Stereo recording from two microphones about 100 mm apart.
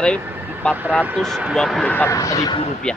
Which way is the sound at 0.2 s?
20° right (ahead or behind).